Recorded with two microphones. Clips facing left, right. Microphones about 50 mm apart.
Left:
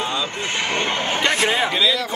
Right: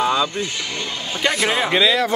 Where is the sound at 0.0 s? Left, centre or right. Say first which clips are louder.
Right 6 dB; right.